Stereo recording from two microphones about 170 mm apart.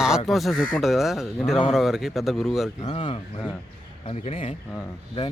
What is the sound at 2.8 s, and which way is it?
Speech, 30° left (ahead or behind).